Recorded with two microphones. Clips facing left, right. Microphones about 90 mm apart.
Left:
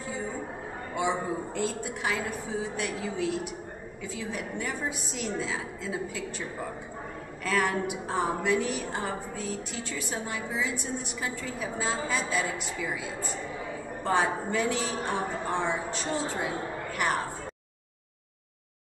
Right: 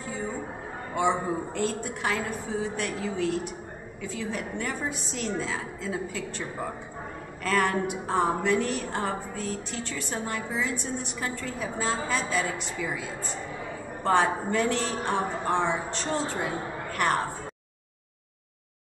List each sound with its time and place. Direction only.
1.3 s a woman's voice: 5° left (ahead or behind)
7.4 s a woman's voice: 5° left (ahead or behind)